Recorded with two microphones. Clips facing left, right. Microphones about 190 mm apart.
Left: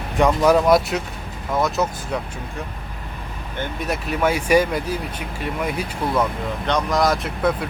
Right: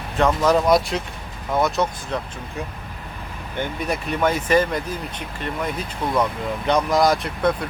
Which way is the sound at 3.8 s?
Centre (ahead or behind).